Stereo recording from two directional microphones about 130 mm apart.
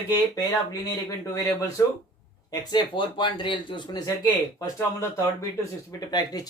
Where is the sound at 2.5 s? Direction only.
35° left (ahead or behind).